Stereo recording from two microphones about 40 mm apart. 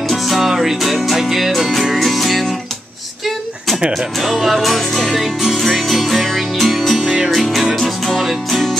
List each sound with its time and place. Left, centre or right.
0.1 s music: centre
3.9 s music: centre
5.1 s music: centre